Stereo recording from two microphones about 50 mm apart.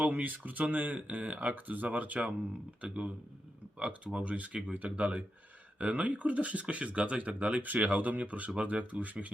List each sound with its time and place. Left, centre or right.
0.0 s speech: right